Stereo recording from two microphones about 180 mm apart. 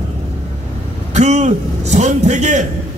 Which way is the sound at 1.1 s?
40° right (ahead or behind).